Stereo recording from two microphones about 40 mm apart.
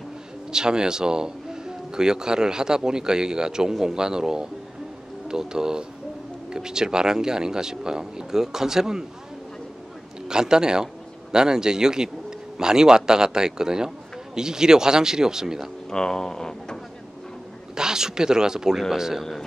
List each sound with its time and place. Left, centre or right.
0.5 s a man's voice: centre
10.2 s a man's voice: centre
15.9 s speech: centre
17.7 s a man's voice: centre